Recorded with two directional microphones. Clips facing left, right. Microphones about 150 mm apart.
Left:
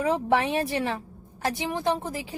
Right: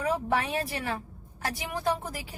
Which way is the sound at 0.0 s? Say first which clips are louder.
Left 4 dB; 25° left (ahead or behind).